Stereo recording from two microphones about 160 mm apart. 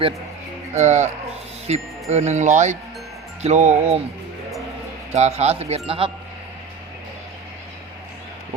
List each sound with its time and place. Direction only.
0.7 s speech: 45° right (ahead or behind)
5.1 s speech: 45° right (ahead or behind)